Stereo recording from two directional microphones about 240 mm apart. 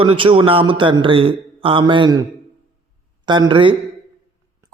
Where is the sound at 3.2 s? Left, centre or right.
Centre.